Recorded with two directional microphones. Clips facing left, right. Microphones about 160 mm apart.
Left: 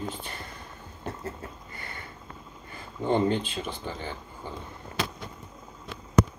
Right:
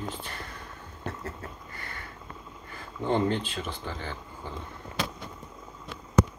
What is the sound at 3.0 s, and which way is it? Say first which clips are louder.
Speech: left 2 dB; 15° left (ahead or behind).